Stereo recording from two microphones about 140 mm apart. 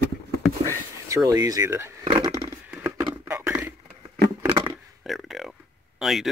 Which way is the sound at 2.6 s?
10° right (ahead or behind).